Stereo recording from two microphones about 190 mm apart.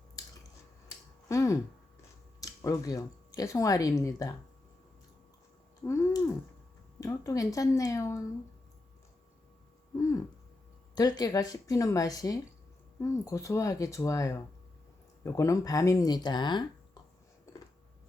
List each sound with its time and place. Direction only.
1.3 s speech: 15° left (ahead or behind)
5.8 s a sound: 15° left (ahead or behind)
7.0 s speech: 15° left (ahead or behind)
10.9 s speech: 20° left (ahead or behind)